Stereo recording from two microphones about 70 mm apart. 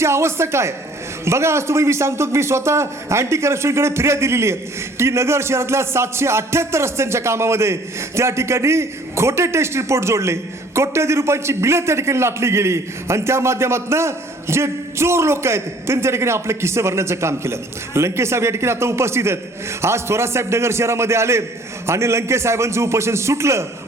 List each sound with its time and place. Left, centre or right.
0.0 s a man's voice: right